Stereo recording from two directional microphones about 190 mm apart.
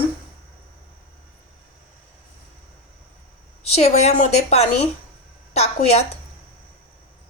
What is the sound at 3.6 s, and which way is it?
A woman's voice, 35° left (ahead or behind).